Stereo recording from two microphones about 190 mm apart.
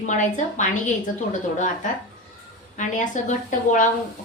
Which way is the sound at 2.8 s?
40° left (ahead or behind).